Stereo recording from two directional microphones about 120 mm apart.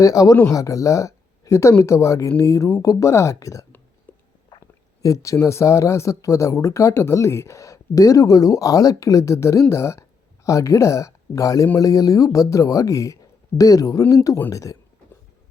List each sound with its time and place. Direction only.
0.0 s speech: 30° left (ahead or behind)
4.1 s a sound: 15° left (ahead or behind)
5.0 s speech: 25° left (ahead or behind)